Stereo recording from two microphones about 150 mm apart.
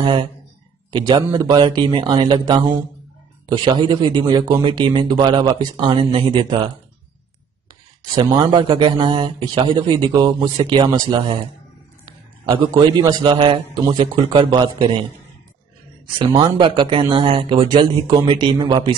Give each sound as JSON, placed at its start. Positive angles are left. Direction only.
{"t": 0.0, "sound": "a man's voice", "side_deg": -35}
{"t": 8.1, "sound": "speech", "side_deg": -30}
{"t": 12.4, "sound": "speech", "side_deg": -35}
{"t": 16.2, "sound": "speech", "side_deg": -30}